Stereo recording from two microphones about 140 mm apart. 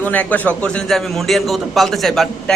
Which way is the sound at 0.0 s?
10° left (ahead or behind).